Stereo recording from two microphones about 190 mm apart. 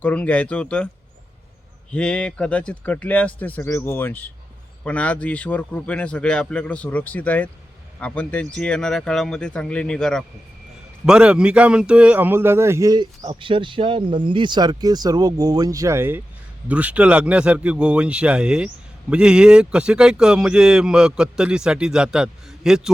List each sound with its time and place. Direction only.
0.0 s a man's voice: 5° left (ahead or behind)
1.9 s a man's voice: 5° left (ahead or behind)